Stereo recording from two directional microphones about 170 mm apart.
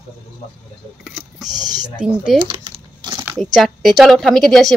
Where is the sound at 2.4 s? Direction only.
30° right (ahead or behind).